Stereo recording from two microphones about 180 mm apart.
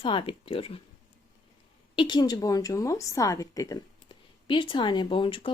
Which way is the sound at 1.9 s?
25° left (ahead or behind).